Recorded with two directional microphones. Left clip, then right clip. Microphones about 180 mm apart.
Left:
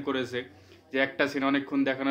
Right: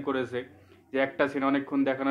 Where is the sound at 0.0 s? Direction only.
20° left (ahead or behind).